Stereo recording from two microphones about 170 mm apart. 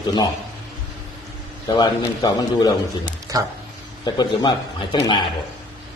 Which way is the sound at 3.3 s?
20° right (ahead or behind).